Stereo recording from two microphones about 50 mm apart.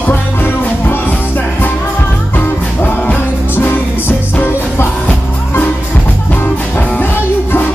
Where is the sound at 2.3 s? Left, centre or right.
Left.